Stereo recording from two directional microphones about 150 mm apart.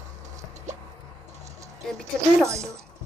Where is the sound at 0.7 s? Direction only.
50° right (ahead or behind).